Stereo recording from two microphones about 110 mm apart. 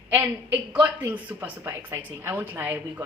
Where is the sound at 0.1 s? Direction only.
15° right (ahead or behind).